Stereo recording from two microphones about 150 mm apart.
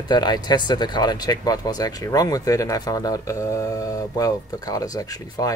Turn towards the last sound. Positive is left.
turn(degrees=25)  # may be behind; listen again after turning